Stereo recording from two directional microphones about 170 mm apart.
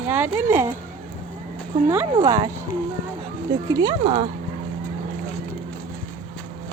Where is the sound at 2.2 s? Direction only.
25° right (ahead or behind).